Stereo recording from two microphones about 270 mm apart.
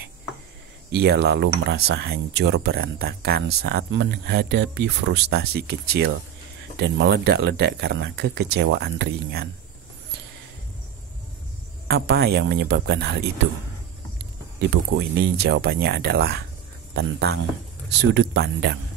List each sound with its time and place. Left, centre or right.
0.9 s speech: right
11.9 s speech: right
14.6 s speech: right